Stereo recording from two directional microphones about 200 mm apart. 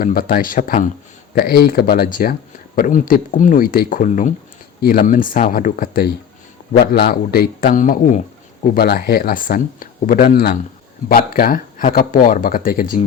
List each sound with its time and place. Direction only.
0.0 s speech: 45° left (ahead or behind)
4.8 s speech: 50° left (ahead or behind)